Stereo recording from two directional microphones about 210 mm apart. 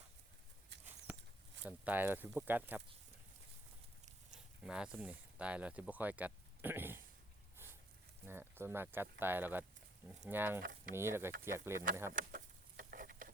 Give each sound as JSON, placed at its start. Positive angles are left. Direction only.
{"t": 1.6, "sound": "speech", "side_deg": -10}
{"t": 4.6, "sound": "speech", "side_deg": -5}
{"t": 8.3, "sound": "speech", "side_deg": -10}
{"t": 10.6, "sound": "speech", "side_deg": -45}
{"t": 10.9, "sound": "speech", "side_deg": -10}
{"t": 12.1, "sound": "chicken", "side_deg": -40}